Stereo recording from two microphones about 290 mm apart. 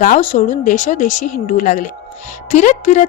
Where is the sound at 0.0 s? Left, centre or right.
Left.